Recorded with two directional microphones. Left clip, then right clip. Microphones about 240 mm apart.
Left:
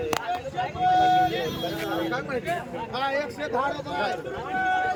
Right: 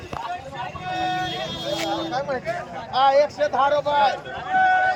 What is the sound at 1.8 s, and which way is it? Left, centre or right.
Speech, centre.